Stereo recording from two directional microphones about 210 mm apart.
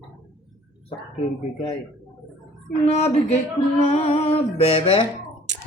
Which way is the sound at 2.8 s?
30° left (ahead or behind).